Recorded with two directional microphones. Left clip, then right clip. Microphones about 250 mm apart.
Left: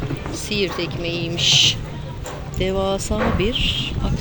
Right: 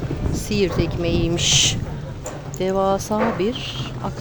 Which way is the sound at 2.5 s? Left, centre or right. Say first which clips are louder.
Right 2 dB; centre.